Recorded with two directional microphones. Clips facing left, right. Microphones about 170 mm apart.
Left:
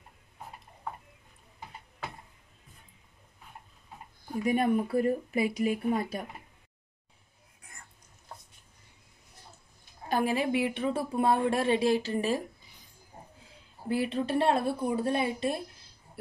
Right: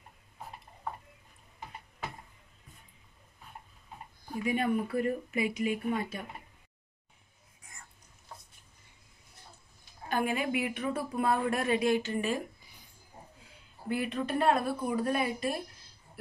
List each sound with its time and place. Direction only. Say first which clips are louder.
4.5 s speech: left 3 dB; 40° left (ahead or behind)
10.0 s a woman's voice: left 3 dB; 35° left (ahead or behind)
13.8 s a woman's voice: left 3 dB; 30° left (ahead or behind)